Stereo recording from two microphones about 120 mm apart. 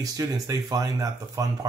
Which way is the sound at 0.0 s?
30° right (ahead or behind).